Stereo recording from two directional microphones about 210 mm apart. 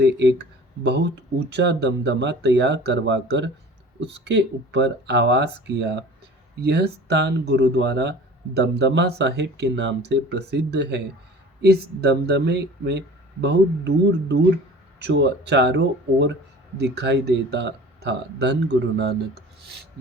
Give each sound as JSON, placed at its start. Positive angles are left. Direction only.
{"t": 0.0, "sound": "speech", "side_deg": -55}